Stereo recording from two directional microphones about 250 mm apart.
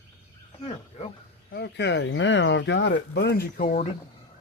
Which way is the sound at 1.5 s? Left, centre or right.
Left.